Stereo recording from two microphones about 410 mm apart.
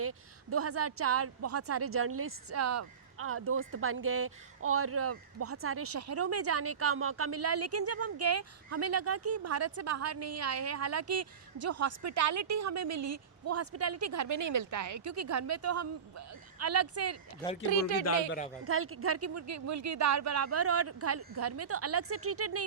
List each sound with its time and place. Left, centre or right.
0.0 s a woman's voice: right
17.7 s speech: left
18.3 s speech: centre
18.6 s a woman's voice: right